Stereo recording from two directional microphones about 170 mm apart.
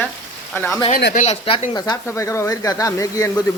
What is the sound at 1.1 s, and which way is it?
Speech, 40° left (ahead or behind).